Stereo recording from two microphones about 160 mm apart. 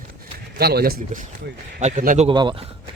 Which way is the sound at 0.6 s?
75° right (ahead or behind).